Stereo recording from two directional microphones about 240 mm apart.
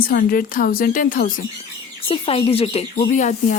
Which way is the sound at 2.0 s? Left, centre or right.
Left.